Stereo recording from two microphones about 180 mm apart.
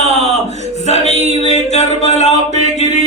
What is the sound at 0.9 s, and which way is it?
Music, 35° left (ahead or behind).